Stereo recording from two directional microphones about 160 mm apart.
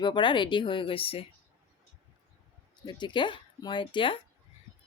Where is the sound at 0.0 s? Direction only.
30° left (ahead or behind).